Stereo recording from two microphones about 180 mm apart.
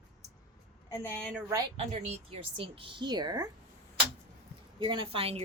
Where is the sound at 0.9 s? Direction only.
10° left (ahead or behind).